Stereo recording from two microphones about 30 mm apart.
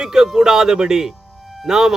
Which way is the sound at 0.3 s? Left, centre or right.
Centre.